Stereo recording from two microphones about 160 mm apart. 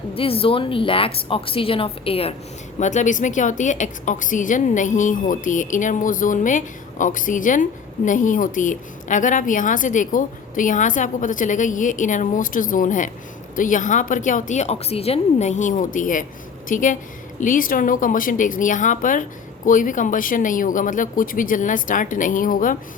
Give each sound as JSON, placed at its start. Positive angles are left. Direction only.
{"t": 0.1, "sound": "speech", "side_deg": 35}
{"t": 2.7, "sound": "a woman's voice", "side_deg": 50}